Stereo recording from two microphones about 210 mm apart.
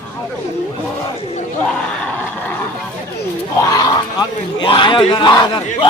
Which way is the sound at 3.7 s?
20° left (ahead or behind).